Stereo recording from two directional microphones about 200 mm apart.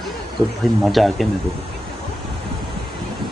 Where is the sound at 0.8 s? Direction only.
Centre (ahead or behind).